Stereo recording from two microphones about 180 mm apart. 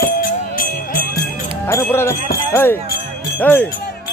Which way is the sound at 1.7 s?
15° left (ahead or behind).